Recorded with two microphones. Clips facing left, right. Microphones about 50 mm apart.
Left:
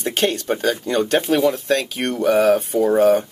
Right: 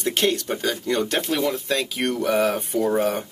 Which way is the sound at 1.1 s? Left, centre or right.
Centre.